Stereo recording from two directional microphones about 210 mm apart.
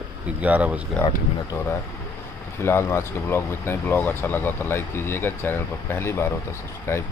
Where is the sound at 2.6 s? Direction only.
10° left (ahead or behind).